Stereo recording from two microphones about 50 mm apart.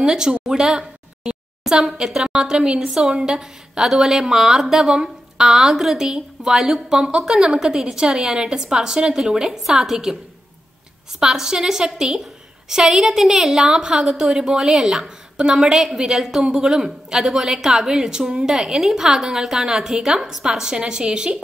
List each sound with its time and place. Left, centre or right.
0.0 s a woman's voice: centre
11.1 s a woman's voice: centre